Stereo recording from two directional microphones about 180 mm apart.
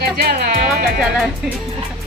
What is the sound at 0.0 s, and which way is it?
Music, 60° right (ahead or behind).